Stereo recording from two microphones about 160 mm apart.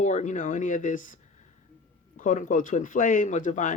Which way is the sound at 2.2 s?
50° left (ahead or behind).